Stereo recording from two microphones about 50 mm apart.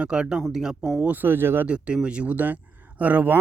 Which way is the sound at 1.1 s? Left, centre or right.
Right.